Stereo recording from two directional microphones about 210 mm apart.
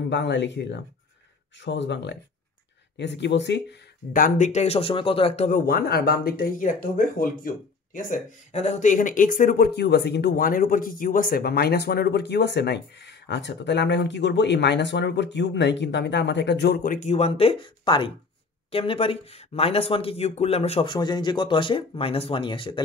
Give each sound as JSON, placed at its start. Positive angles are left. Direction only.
{"t": 0.1, "sound": "speech", "side_deg": 55}
{"t": 4.1, "sound": "speech", "side_deg": 40}
{"t": 5.7, "sound": "speech", "side_deg": 45}